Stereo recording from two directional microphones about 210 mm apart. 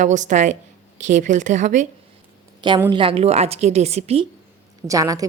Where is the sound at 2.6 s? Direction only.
20° right (ahead or behind).